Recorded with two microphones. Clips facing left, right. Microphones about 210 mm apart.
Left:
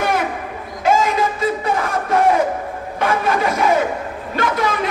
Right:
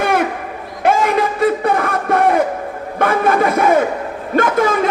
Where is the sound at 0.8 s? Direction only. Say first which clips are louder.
Right 2 dB; 60° right (ahead or behind).